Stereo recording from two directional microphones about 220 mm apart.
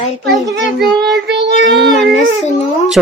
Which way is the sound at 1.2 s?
50° right (ahead or behind).